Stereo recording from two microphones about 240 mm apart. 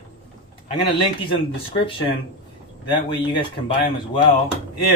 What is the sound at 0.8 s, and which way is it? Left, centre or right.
Speech, left.